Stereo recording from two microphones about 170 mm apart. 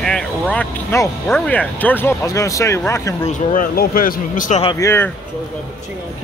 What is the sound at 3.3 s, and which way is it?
Speech, 55° left (ahead or behind).